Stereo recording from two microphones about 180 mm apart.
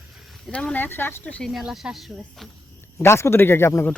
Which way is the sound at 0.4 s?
5° left (ahead or behind).